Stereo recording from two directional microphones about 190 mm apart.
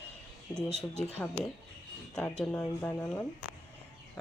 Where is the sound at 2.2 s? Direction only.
5° left (ahead or behind).